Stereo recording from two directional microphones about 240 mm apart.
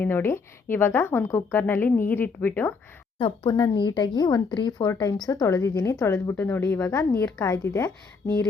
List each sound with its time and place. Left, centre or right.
0.0 s a woman's voice: centre
3.2 s a woman's voice: left; by 8.4 s centre